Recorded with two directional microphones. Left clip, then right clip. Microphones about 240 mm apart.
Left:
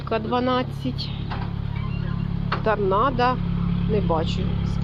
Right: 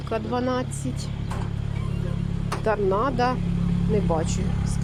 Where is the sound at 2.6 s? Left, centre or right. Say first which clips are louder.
Left 2 dB; right.